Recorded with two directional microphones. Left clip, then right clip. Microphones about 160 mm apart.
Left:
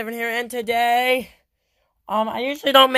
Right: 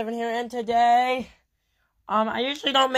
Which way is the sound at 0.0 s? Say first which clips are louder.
Left 2 dB; 30° left (ahead or behind).